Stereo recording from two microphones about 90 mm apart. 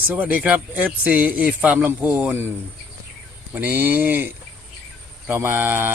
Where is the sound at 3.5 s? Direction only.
20° right (ahead or behind).